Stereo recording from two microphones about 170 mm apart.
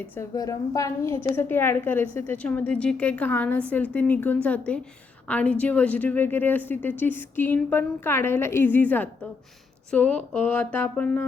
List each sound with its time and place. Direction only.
0.2 s a woman's voice: 20° left (ahead or behind)